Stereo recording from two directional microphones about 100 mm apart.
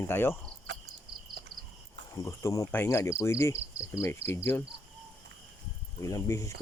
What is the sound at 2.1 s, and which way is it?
Speech, 30° left (ahead or behind).